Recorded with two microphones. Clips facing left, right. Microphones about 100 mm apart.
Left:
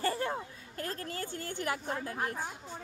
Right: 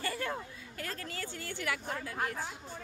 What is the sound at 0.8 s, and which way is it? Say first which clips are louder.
Speech: left 3 dB; 40° left (ahead or behind).